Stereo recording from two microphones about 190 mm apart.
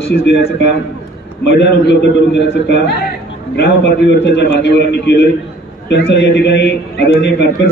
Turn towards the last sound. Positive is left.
turn(degrees=65)  # may be behind; listen again after turning